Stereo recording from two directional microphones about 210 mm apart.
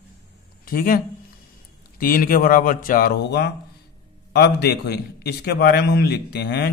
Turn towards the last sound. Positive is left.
turn(degrees=50)  # may be behind; listen again after turning